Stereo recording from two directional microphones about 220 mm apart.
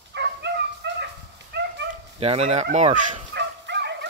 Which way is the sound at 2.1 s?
25° right (ahead or behind).